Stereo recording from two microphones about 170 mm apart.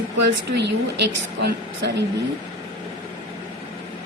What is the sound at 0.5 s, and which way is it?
A woman's voice, 90° right.